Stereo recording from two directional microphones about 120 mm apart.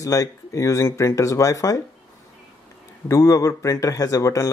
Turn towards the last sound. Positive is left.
turn(degrees=25)  # may be behind; listen again after turning